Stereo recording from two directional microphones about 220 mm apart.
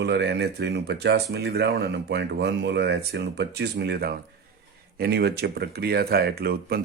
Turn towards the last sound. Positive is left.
turn(degrees=-45)  # may be behind; listen again after turning